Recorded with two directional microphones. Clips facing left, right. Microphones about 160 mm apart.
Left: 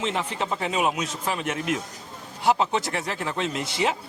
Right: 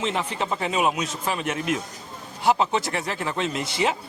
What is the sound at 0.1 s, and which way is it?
Speech, 20° right (ahead or behind).